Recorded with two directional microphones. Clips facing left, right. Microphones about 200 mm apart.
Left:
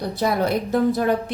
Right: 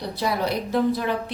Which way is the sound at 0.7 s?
45° left (ahead or behind).